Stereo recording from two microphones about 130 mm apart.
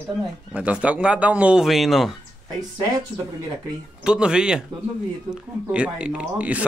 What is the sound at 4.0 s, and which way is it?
Speech, 5° right (ahead or behind).